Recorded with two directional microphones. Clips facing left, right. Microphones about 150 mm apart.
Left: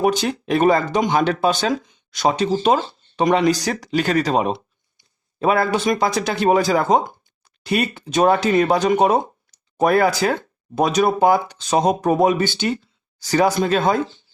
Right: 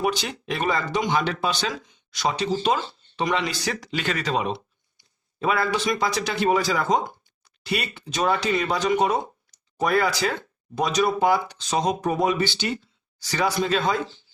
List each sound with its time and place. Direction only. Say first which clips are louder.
0.0 s speech: left 7 dB; 45° left (ahead or behind)